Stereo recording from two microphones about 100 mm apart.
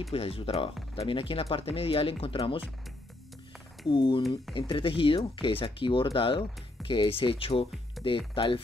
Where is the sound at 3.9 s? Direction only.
55° left (ahead or behind).